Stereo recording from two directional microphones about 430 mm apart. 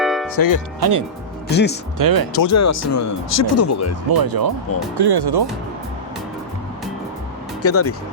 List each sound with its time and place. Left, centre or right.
0.0 s music: centre
0.3 s speech: left
0.8 s speech: right
1.5 s speech: left
2.0 s speech: right
2.3 s speech: left
4.1 s speech: right
7.6 s speech: left